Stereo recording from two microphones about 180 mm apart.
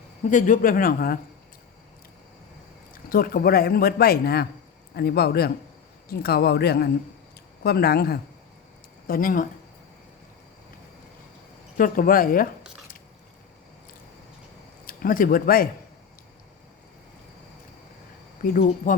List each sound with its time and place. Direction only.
0.3 s speech: 45° left (ahead or behind)
3.1 s speech: 55° left (ahead or behind)
11.8 s speech: 50° left (ahead or behind)
14.8 s speech: 50° left (ahead or behind)
18.9 s speech: 45° left (ahead or behind)